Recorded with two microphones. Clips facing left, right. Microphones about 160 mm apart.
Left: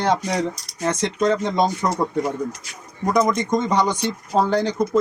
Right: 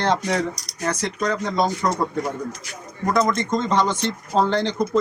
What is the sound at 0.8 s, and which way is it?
Speech, 25° left (ahead or behind).